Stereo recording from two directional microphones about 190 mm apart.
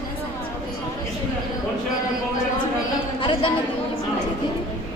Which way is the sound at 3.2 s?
25° left (ahead or behind).